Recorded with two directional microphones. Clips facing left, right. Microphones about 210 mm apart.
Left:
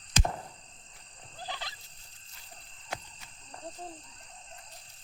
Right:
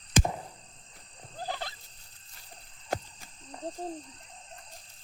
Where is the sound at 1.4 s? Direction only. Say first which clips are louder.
Right 5 dB; 50° right (ahead or behind).